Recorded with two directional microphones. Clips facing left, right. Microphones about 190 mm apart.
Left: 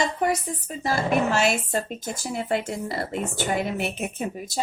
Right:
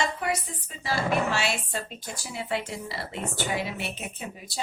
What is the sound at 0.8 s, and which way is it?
Speech, 45° left (ahead or behind).